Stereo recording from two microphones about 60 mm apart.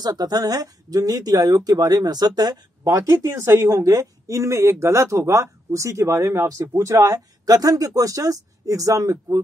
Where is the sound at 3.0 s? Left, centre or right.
Right.